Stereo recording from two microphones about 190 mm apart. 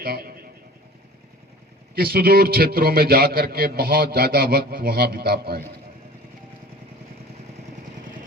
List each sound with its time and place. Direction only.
0.0 s a man's voice: 50° right (ahead or behind)
2.0 s a man's voice: 55° right (ahead or behind)